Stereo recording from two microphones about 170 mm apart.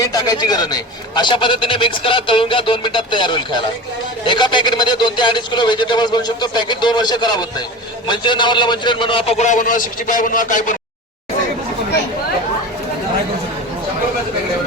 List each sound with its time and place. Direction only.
0.0 s a man's voice: 20° left (ahead or behind); by 10.8 s 50° left (ahead or behind)